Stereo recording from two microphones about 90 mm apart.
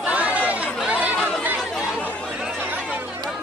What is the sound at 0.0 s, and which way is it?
Chatter, 15° right (ahead or behind).